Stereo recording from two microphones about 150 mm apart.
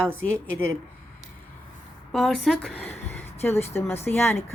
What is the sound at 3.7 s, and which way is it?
Speech, 15° left (ahead or behind).